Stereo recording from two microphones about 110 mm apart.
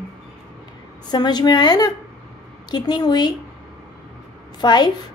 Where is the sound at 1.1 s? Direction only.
40° left (ahead or behind).